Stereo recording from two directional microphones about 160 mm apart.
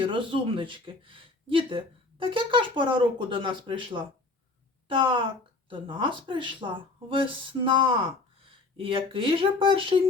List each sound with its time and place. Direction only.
0.0 s speech: 30° right (ahead or behind)